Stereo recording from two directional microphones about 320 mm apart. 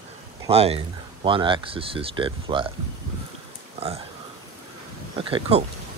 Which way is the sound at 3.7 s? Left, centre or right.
Centre.